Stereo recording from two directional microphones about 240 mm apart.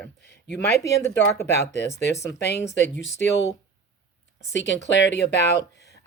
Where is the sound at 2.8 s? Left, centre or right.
Left.